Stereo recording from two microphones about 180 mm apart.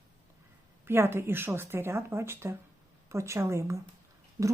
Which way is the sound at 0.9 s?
15° right (ahead or behind).